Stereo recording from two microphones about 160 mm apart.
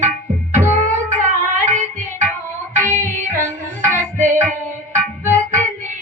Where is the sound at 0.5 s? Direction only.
50° right (ahead or behind).